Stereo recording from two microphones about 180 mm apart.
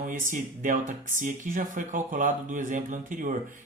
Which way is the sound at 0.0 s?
45° right (ahead or behind).